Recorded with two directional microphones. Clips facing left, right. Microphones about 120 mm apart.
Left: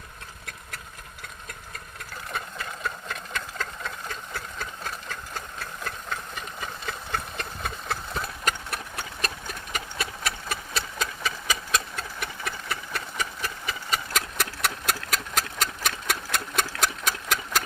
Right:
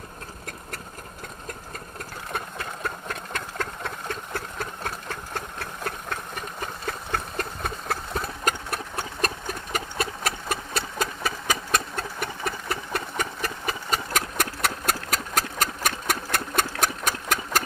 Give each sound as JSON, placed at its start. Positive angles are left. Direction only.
{"t": 2.3, "sound": "engine", "side_deg": -50}
{"t": 7.1, "sound": "engine", "side_deg": -40}